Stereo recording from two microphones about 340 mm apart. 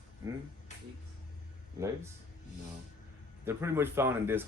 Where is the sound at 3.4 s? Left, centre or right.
Centre.